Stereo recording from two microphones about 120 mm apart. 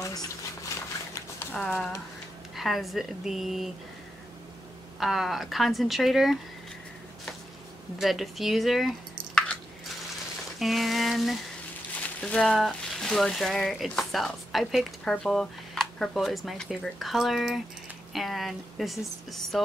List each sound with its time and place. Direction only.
0.0 s boiling: 30° left (ahead or behind)
1.5 s speech: 10° left (ahead or behind)
2.5 s speech: centre (ahead or behind)
5.0 s speech: centre (ahead or behind)
8.0 s speech: centre (ahead or behind)
10.6 s speech: centre (ahead or behind)